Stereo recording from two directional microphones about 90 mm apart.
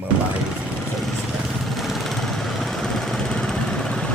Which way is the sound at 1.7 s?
Centre (ahead or behind).